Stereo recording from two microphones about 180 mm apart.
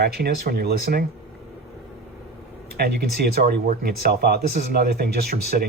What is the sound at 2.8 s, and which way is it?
Speech, 55° right (ahead or behind).